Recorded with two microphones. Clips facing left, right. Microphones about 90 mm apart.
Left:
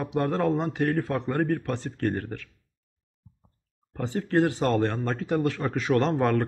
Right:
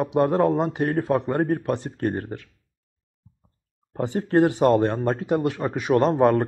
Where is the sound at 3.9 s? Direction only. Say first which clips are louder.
Right 4 dB; 25° right (ahead or behind).